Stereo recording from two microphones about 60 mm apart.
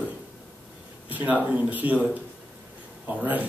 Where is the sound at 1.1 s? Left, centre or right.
Right.